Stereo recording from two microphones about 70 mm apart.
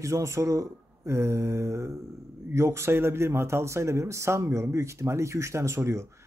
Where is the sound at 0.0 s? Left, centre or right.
Right.